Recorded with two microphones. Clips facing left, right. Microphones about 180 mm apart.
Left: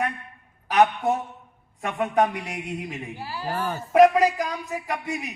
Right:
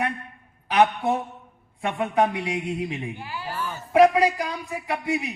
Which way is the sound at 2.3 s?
45° left (ahead or behind).